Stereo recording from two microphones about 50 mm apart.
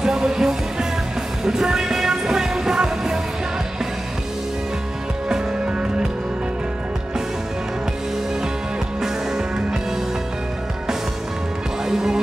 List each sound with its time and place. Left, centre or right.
0.0 s music: centre
5.3 s music: right
9.0 s music: centre
11.8 s music: centre